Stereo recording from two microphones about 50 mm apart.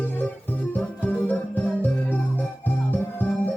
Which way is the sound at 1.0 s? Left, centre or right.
Left.